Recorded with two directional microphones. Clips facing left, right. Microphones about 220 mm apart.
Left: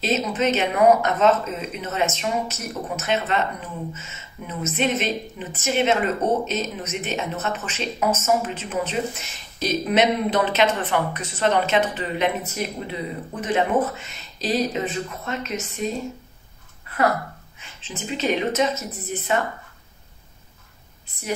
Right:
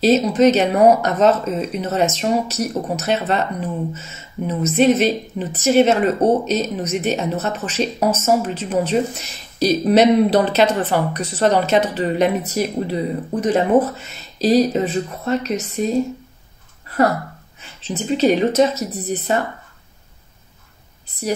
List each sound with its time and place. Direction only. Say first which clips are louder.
0.0 s a woman's voice: right 9 dB; 40° right (ahead or behind)
4.5 s a woman's voice: right 9 dB; 35° right (ahead or behind)
16.9 s a woman's voice: right 4 dB; 35° right (ahead or behind)